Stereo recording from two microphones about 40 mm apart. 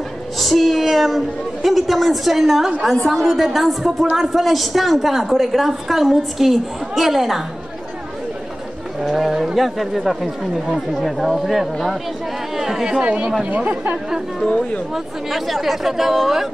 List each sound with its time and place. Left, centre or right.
0.4 s a woman's voice: centre
2.9 s a woman's voice: centre
9.0 s a woman's voice: centre
12.5 s chatter: centre
13.0 s speech: right
15.3 s a woman's voice: centre